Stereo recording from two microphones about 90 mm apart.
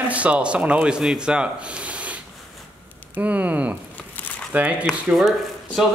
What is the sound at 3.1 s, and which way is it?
Speech, 15° right (ahead or behind).